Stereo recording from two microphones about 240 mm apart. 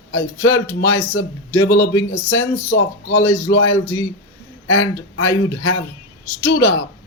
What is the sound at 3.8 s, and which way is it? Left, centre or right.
Speech, centre.